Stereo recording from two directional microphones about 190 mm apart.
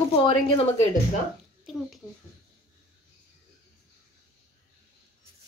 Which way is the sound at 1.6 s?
Centre (ahead or behind).